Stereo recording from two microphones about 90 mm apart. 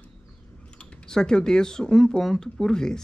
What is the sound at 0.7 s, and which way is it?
Speech, 10° left (ahead or behind).